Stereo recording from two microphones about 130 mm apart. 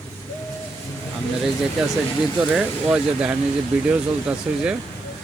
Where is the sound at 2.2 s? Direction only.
5° right (ahead or behind).